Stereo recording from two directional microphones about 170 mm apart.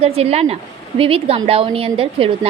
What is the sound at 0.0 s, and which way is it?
A woman's voice, 35° right (ahead or behind).